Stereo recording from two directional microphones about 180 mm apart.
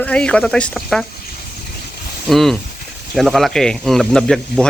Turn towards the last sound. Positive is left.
turn(degrees=0)  # may be behind; listen again after turning